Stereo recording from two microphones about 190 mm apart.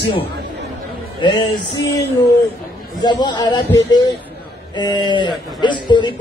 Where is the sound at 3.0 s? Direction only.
25° left (ahead or behind).